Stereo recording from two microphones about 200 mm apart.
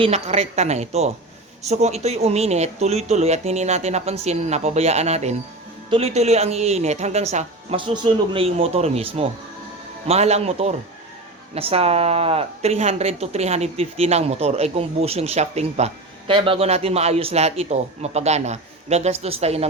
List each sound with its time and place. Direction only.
0.0 s speech: 35° right (ahead or behind)